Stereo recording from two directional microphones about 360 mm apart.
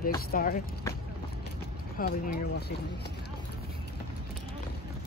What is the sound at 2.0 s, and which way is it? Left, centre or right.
Speech, left.